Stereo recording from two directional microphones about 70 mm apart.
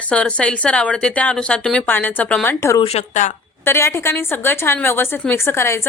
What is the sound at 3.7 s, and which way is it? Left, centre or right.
Speech, left.